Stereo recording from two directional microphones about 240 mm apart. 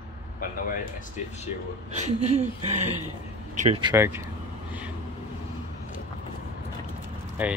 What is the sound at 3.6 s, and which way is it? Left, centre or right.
Speech, right.